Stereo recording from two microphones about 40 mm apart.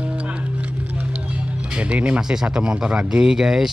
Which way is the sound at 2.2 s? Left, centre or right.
Centre.